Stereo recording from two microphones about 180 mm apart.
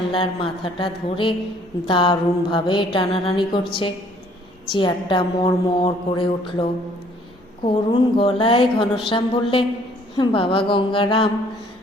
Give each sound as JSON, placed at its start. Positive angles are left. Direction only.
{"t": 0.1, "sound": "a woman's voice", "side_deg": 30}